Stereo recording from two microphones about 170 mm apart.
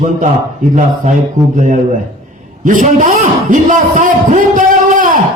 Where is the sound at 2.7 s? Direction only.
50° right (ahead or behind).